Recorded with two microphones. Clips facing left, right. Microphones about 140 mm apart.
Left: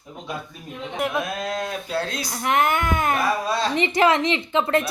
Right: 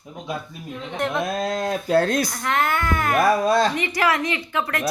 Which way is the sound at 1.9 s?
50° right (ahead or behind).